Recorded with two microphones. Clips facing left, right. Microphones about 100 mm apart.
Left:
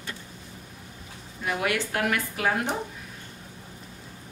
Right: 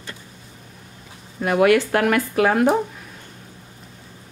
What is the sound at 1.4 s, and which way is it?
Speech, 65° right (ahead or behind).